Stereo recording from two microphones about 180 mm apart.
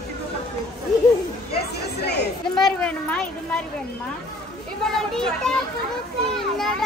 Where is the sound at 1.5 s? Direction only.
70° left (ahead or behind).